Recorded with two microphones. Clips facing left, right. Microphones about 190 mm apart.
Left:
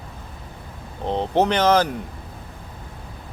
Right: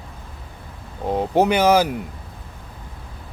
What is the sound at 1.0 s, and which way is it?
Speech, 10° right (ahead or behind).